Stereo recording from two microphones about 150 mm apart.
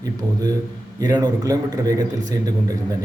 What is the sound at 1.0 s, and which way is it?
A man's voice, 25° right (ahead or behind).